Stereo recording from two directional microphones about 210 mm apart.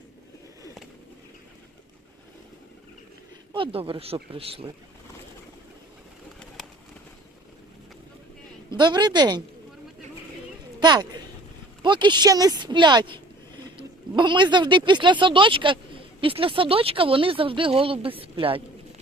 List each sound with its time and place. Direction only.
3.5 s speech: 25° right (ahead or behind)
8.7 s speech: 20° right (ahead or behind)
10.8 s speech: 20° right (ahead or behind)